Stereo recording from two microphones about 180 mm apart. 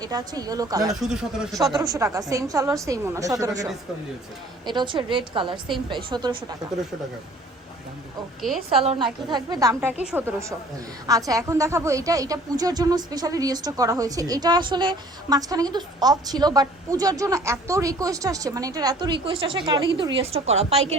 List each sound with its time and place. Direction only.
0.0 s a woman's voice: 20° right (ahead or behind)
8.4 s a woman's voice: centre (ahead or behind)
8.8 s a woman's voice: 30° right (ahead or behind)
9.3 s a woman's voice: 20° right (ahead or behind)
10.0 s a woman's voice: 10° right (ahead or behind); by 20.8 s 35° right (ahead or behind)